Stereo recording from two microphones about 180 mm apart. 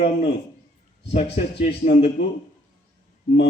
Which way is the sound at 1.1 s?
35° left (ahead or behind).